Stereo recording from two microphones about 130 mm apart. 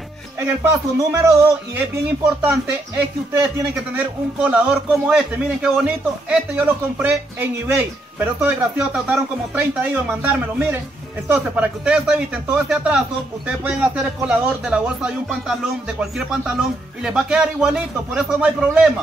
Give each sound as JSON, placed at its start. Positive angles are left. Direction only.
{"t": 0.9, "sound": "speech", "side_deg": -25}
{"t": 1.8, "sound": "a man's voice", "side_deg": -10}